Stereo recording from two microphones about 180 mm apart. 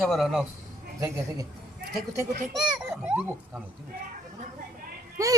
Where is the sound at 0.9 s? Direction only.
20° right (ahead or behind).